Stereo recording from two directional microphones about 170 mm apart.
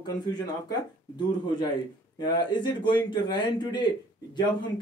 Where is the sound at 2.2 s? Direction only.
25° left (ahead or behind).